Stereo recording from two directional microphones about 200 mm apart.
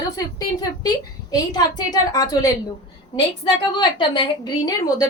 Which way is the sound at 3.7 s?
20° left (ahead or behind).